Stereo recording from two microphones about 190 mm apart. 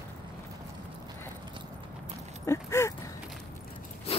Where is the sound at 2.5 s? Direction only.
15° left (ahead or behind).